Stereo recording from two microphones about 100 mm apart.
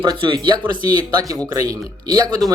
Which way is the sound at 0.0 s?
55° right (ahead or behind).